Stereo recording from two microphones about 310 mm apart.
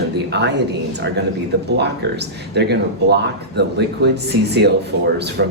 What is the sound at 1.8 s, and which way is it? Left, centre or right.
Speech, right.